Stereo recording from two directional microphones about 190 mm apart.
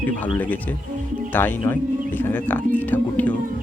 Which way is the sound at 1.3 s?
10° left (ahead or behind).